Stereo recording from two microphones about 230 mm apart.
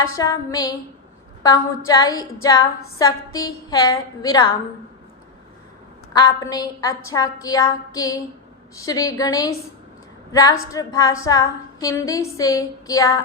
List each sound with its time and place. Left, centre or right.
0.1 s a woman's voice: centre
6.1 s a woman's voice: centre